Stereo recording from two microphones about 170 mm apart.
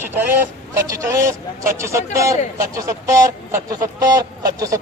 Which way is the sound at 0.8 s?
20° right (ahead or behind).